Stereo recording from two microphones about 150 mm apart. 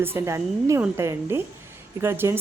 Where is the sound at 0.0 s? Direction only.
15° right (ahead or behind).